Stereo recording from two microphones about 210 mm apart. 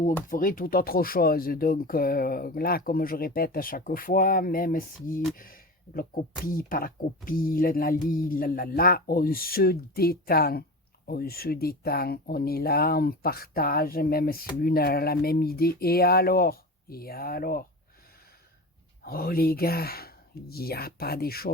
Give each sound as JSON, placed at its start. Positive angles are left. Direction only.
{"t": 0.0, "sound": "speech", "side_deg": 40}
{"t": 19.0, "sound": "speech", "side_deg": 45}